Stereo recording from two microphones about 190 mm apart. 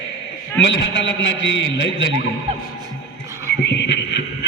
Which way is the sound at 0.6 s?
70° left (ahead or behind).